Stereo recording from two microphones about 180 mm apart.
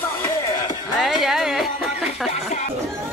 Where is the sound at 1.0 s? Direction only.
Centre (ahead or behind).